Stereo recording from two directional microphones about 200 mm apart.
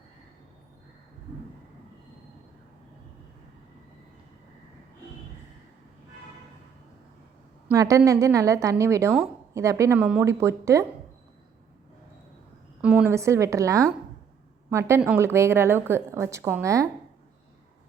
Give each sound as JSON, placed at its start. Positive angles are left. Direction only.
{"t": 7.8, "sound": "a woman's voice", "side_deg": -15}
{"t": 12.8, "sound": "a woman's voice", "side_deg": -5}